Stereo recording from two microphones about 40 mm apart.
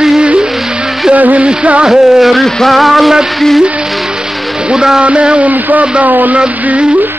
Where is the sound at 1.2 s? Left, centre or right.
Right.